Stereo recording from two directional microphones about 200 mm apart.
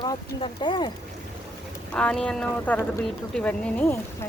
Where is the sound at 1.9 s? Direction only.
5° left (ahead or behind).